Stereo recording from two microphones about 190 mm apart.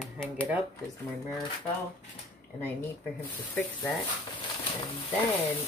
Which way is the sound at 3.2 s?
10° left (ahead or behind).